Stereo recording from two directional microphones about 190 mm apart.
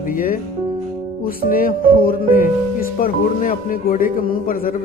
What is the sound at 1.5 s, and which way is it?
Speech, 50° left (ahead or behind).